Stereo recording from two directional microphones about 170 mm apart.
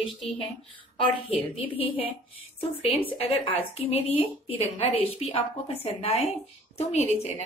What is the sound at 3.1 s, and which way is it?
A woman's voice, 35° left (ahead or behind).